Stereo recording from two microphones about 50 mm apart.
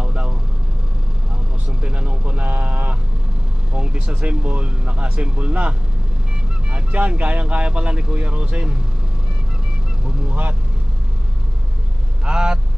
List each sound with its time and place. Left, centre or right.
0.0 s vehicle: centre
1.7 s vehicle: centre
3.7 s a sound: right
4.0 s speech: right
12.3 s speech: centre